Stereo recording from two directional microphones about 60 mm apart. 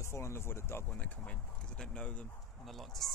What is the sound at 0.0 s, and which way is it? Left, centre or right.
Speech, left.